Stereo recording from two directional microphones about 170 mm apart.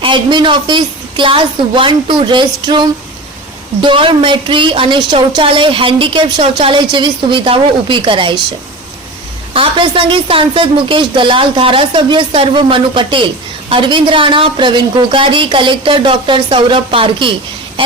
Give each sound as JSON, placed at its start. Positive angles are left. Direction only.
{"t": 0.0, "sound": "a woman's voice", "side_deg": -30}
{"t": 9.5, "sound": "a woman's voice", "side_deg": -30}
{"t": 17.8, "sound": "a sound", "side_deg": -35}